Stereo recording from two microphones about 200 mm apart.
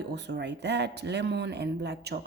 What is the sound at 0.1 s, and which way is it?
Speech, 60° right (ahead or behind).